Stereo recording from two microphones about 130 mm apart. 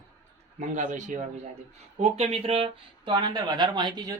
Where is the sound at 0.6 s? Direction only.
70° right (ahead or behind).